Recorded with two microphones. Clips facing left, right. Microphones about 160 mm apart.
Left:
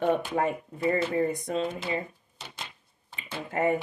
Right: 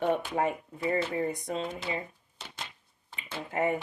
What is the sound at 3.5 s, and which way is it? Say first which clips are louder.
Speech: left 3 dB; 35° left (ahead or behind).